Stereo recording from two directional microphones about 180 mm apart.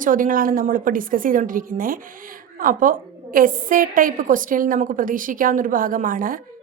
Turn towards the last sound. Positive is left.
turn(degrees=-50)  # may be behind; listen again after turning